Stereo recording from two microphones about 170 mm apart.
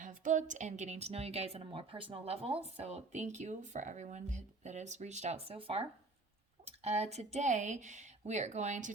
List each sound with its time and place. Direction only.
0.0 s a woman's voice: 50° right (ahead or behind)